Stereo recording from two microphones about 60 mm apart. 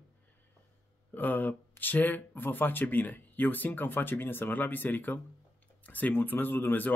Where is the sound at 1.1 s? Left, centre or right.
Left.